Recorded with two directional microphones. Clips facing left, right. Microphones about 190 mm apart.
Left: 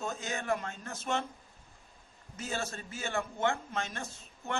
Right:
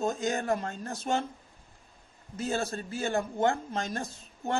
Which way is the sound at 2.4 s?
35° right (ahead or behind).